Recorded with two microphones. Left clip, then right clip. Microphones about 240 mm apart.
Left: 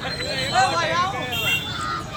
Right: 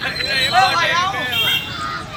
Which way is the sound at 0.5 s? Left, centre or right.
Right.